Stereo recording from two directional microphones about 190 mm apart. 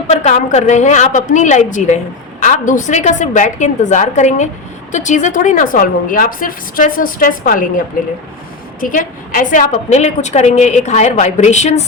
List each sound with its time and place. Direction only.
0.1 s a woman's voice: 40° left (ahead or behind)